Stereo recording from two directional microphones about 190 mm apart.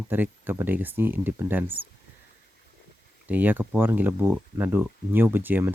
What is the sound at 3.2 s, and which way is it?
Speech, 10° right (ahead or behind).